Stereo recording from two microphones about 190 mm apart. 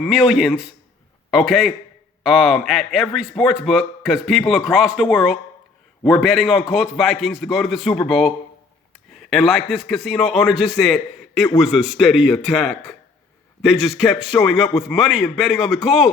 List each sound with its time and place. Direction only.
0.0 s a man's voice: centre (ahead or behind)